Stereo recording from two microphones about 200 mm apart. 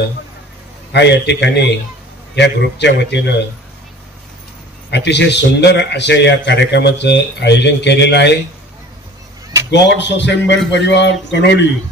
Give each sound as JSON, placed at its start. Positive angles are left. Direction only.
{"t": 0.9, "sound": "a man's voice", "side_deg": 60}
{"t": 4.9, "sound": "a man's voice", "side_deg": 60}
{"t": 9.7, "sound": "a man's voice", "side_deg": 60}